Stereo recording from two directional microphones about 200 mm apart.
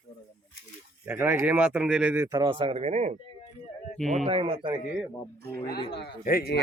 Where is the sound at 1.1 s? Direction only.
10° right (ahead or behind); by 3.1 s 35° right (ahead or behind).